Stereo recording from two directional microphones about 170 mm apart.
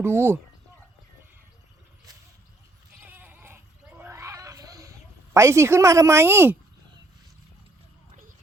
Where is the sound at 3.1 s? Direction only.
10° right (ahead or behind).